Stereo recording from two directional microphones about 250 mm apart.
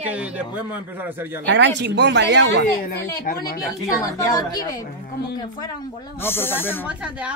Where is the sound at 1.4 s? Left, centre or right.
Right.